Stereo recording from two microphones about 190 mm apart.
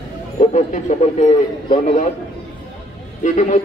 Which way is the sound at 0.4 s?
35° left (ahead or behind).